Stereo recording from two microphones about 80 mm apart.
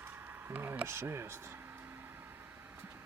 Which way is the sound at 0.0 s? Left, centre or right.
Right.